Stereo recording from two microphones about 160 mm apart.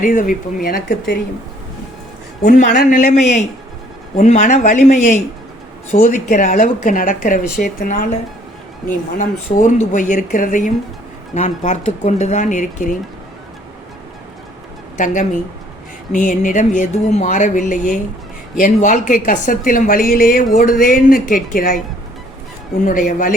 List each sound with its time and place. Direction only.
0.0 s a woman's voice: 60° left (ahead or behind); by 1.2 s 75° left (ahead or behind)
2.4 s a woman's voice: 55° left (ahead or behind)
2.9 s a woman's voice: 50° left (ahead or behind)
14.9 s a woman's voice: 50° left (ahead or behind)
22.9 s a woman's voice: 55° left (ahead or behind)